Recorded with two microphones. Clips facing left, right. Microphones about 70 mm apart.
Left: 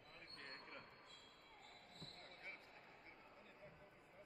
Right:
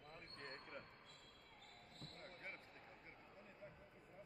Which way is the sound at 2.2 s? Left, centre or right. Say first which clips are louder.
Right 3 dB; right.